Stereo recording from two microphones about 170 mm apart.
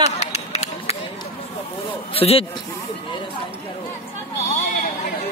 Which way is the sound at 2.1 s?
35° left (ahead or behind).